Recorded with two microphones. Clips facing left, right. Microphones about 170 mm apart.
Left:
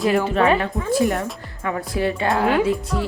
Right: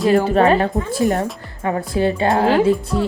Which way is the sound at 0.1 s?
35° right (ahead or behind).